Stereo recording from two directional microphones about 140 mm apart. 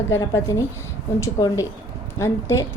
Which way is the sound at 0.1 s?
25° left (ahead or behind).